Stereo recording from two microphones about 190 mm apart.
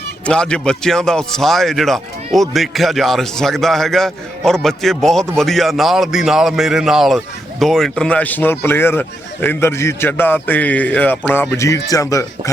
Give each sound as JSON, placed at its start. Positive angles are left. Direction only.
{"t": 0.3, "sound": "speech", "side_deg": 5}